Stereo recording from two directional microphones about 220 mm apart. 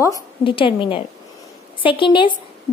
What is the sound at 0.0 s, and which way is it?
A woman's voice, 20° left (ahead or behind).